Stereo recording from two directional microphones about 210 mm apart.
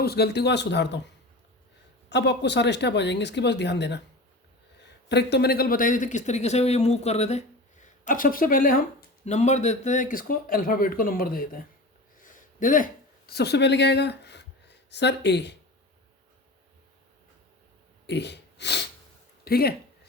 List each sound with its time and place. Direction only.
0.0 s speech: 50° left (ahead or behind)
2.0 s speech: 55° left (ahead or behind)
5.0 s speech: 55° left (ahead or behind)
12.2 s a sound: 40° left (ahead or behind)
18.0 s a sound: 55° left (ahead or behind)
19.5 s speech: 45° left (ahead or behind)